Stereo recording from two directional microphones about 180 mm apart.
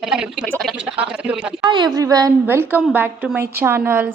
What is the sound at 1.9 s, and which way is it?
A woman's voice, 20° right (ahead or behind).